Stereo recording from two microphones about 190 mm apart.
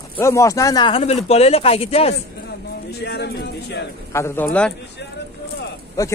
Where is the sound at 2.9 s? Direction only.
60° left (ahead or behind).